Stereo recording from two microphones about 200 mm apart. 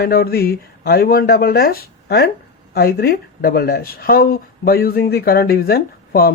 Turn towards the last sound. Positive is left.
turn(degrees=50)  # may be behind; listen again after turning